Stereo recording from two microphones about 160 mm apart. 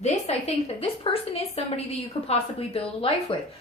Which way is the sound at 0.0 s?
40° left (ahead or behind).